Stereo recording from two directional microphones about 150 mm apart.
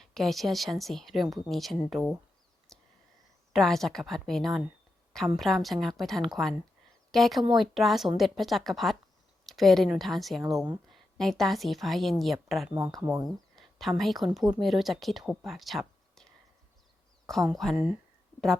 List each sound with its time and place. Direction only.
0.0 s speech: centre (ahead or behind)
2.7 s a sound: centre (ahead or behind)
3.5 s a woman's voice: centre (ahead or behind)
13.0 s speech: 20° right (ahead or behind)
13.2 s a sound: centre (ahead or behind)
14.0 s speech: centre (ahead or behind)
17.5 s speech: centre (ahead or behind)